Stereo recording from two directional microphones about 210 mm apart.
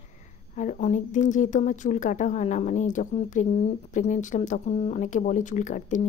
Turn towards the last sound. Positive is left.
turn(degrees=35)  # may be behind; listen again after turning